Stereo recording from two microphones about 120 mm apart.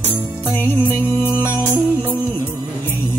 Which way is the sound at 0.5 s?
15° left (ahead or behind).